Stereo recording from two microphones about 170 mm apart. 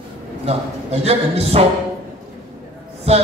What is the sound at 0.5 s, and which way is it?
A man's voice, 35° right (ahead or behind).